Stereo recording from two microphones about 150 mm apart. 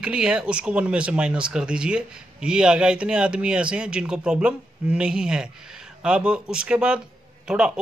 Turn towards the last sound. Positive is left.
turn(degrees=-5)  # may be behind; listen again after turning